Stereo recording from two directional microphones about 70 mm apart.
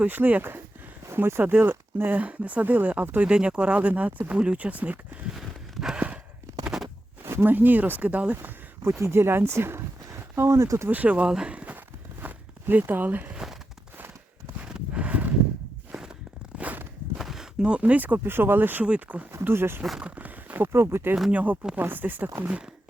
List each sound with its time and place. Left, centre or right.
0.0 s speech: right
5.3 s a sound: centre
7.3 s speech: right
8.4 s speech: right
10.8 s speech: right
11.3 s a sound: centre
13.3 s a sound: centre
14.6 s horse: centre
16.6 s walk: right
17.2 s a sound: centre; by 18.2 s right
18.2 s speech: right
19.3 s speech: right
20.0 s speech: centre